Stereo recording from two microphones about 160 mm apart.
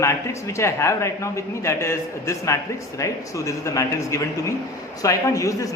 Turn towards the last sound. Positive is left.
turn(degrees=20)  # may be behind; listen again after turning